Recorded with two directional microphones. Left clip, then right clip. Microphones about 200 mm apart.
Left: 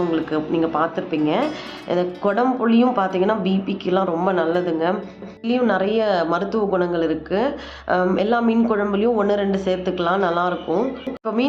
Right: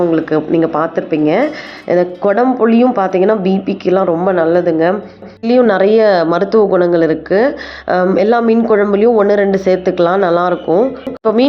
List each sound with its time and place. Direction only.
0.1 s a woman's voice: 30° right (ahead or behind)